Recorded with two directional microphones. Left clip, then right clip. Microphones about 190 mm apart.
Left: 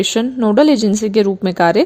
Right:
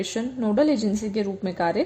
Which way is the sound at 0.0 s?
40° left (ahead or behind).